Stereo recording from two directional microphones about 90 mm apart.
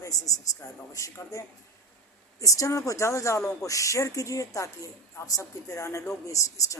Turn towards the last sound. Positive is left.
turn(degrees=35)  # may be behind; listen again after turning